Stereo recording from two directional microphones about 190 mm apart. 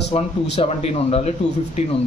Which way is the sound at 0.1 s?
35° left (ahead or behind).